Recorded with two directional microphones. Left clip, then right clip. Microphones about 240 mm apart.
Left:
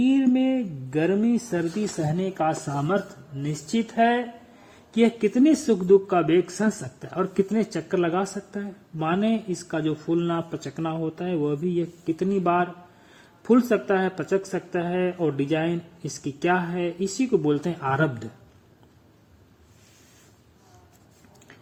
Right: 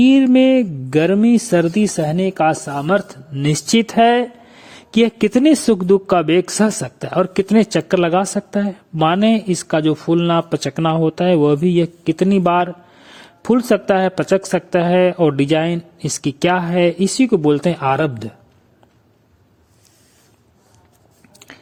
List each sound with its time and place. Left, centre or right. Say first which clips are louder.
0.0 s speech: right 10 dB; right